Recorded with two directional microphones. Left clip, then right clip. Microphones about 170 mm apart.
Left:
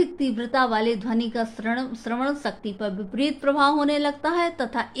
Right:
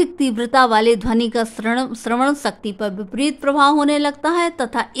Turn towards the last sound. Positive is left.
turn(degrees=-35)  # may be behind; listen again after turning